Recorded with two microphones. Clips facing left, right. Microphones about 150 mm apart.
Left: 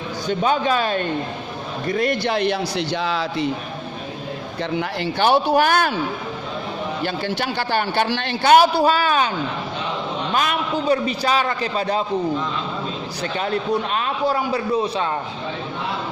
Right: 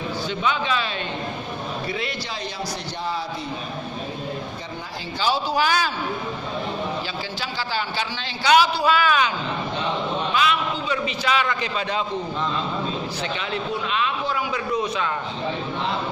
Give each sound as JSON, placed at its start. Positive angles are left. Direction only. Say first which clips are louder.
{"t": 0.3, "sound": "a man's voice", "louder": "left 6 dB", "side_deg": 45}
{"t": 4.8, "sound": "a man's voice", "louder": "left 7 dB", "side_deg": 70}
{"t": 7.0, "sound": "a man's voice", "louder": "left 7 dB", "side_deg": 60}
{"t": 8.8, "sound": "a man's voice", "louder": "left 2 dB", "side_deg": 35}
{"t": 10.3, "sound": "a man's voice", "louder": "left 3 dB", "side_deg": 45}
{"t": 13.2, "sound": "a man's voice", "louder": "left 9 dB", "side_deg": 40}